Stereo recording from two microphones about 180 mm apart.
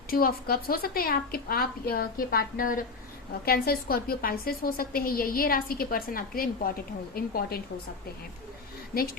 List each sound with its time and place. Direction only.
0.1 s a woman's voice: 55° left (ahead or behind)